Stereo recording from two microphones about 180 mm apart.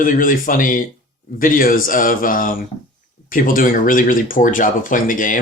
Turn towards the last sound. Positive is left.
turn(degrees=50)  # may be behind; listen again after turning